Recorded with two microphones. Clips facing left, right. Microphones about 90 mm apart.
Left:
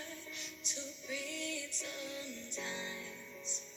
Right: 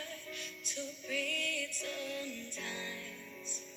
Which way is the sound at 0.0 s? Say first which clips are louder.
Right 2 dB; 20° left (ahead or behind).